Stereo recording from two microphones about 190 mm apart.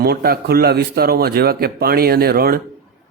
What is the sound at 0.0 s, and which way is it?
A man's voice, 55° right (ahead or behind).